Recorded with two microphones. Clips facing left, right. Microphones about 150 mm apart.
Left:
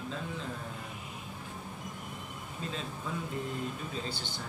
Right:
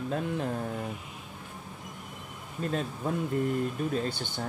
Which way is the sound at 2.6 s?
50° right (ahead or behind).